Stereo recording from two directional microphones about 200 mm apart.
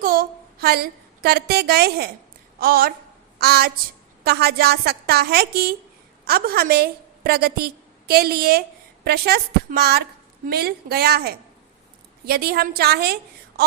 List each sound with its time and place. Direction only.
0.0 s a woman's voice: 45° right (ahead or behind)